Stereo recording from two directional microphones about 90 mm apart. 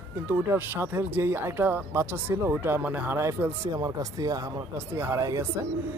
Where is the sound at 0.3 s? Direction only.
25° right (ahead or behind).